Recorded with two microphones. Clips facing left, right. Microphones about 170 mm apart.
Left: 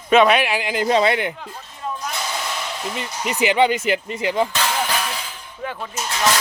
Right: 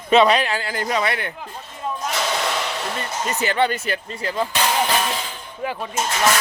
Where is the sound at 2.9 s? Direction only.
15° left (ahead or behind).